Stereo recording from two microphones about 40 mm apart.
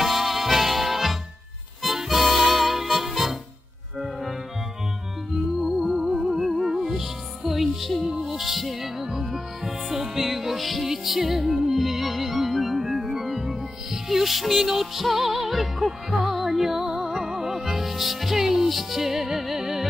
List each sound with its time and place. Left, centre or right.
0.0 s music: centre
4.0 s organ: centre
5.6 s music: centre